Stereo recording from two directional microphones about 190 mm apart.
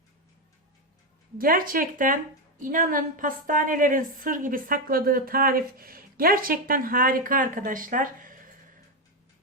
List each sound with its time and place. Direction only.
1.4 s a woman's voice: 50° right (ahead or behind)